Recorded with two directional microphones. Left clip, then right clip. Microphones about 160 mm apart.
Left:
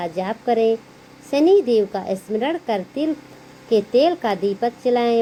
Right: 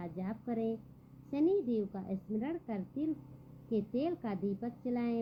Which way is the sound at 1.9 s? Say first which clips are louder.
Left 18 dB; 20° left (ahead or behind).